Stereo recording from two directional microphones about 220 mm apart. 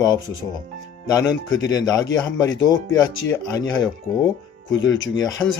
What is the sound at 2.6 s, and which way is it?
Speech, 15° left (ahead or behind).